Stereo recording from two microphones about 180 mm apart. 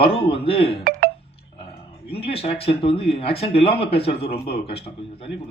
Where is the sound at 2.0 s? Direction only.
30° left (ahead or behind).